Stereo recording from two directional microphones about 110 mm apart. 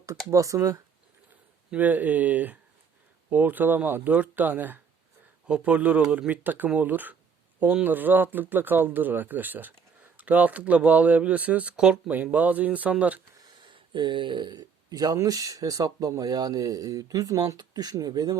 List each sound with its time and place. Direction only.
0.3 s speech: 30° right (ahead or behind)
1.7 s speech: 15° right (ahead or behind)
13.6 s speech: 45° right (ahead or behind)